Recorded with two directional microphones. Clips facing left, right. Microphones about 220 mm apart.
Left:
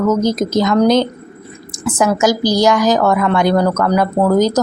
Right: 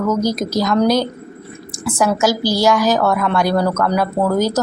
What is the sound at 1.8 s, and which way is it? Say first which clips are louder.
Speech: left 2 dB; 20° left (ahead or behind).